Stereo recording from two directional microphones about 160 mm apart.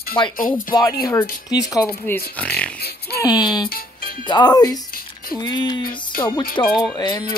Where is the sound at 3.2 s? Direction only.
25° left (ahead or behind).